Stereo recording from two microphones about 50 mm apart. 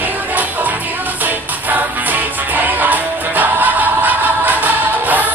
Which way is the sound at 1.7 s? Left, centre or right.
Right.